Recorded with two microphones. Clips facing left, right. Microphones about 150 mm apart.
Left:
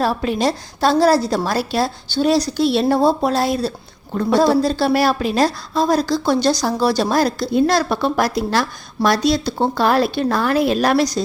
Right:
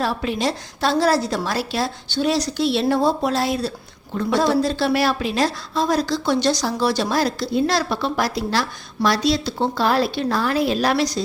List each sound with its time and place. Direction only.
0.0 s a woman's voice: 40° left (ahead or behind)